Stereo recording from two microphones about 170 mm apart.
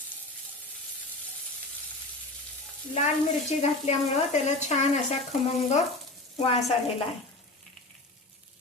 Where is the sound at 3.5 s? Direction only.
40° left (ahead or behind).